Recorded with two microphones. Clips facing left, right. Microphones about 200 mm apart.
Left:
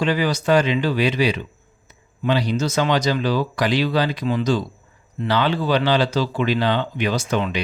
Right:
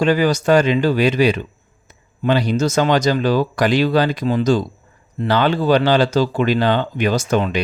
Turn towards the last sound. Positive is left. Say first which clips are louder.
# right 4 dB
turn(degrees=-45)  # may be behind; listen again after turning